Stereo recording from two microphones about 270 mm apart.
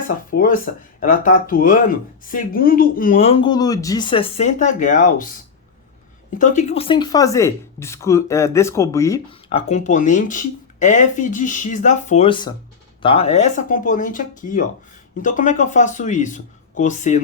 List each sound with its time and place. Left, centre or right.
0.3 s speech: left
6.4 s speech: left